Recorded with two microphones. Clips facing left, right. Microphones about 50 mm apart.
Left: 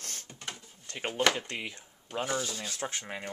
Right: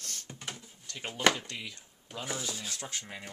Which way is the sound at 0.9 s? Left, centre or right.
Left.